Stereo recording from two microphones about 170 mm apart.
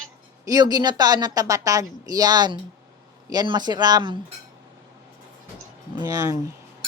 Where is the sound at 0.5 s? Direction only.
20° right (ahead or behind).